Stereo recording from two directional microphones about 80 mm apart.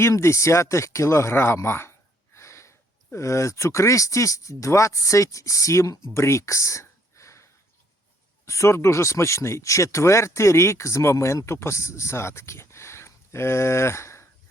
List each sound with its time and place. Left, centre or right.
0.0 s speech: left
6.1 s a sound: left
8.4 s speech: left